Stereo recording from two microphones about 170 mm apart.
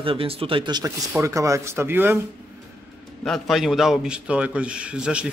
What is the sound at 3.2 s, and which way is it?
A man's voice, centre (ahead or behind).